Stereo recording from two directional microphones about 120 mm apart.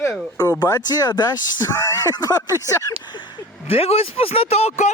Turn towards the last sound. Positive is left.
turn(degrees=65)  # may be behind; listen again after turning